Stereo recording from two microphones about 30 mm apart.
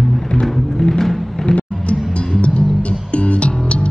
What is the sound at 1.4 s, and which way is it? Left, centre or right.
Music, left.